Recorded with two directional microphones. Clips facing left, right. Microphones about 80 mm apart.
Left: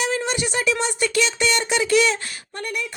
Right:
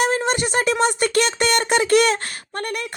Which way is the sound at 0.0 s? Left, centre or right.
Right.